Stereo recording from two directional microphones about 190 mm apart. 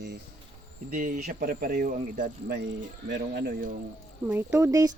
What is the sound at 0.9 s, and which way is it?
Speech, 40° right (ahead or behind).